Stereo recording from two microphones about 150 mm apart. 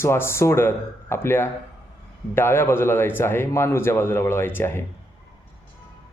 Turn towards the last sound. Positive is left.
turn(degrees=15)  # may be behind; listen again after turning